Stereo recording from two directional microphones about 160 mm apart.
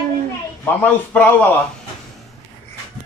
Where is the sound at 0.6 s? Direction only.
10° left (ahead or behind).